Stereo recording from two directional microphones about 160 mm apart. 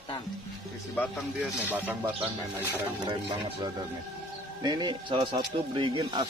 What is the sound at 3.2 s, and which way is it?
Speech, 25° right (ahead or behind).